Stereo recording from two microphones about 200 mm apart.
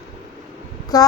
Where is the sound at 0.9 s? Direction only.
20° left (ahead or behind).